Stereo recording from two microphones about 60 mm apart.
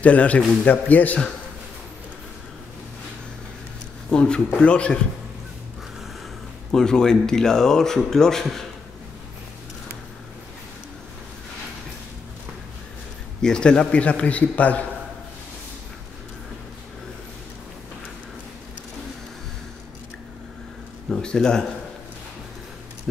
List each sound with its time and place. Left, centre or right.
0.0 s a man's voice: left
4.1 s a man's voice: centre
6.7 s speech: centre
13.4 s a man's voice: centre
21.1 s speech: centre